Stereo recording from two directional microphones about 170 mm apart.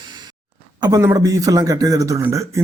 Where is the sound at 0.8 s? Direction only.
20° right (ahead or behind).